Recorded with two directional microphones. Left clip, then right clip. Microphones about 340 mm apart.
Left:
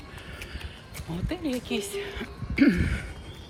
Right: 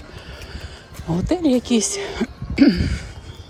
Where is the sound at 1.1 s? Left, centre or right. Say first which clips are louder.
Right 13 dB; centre.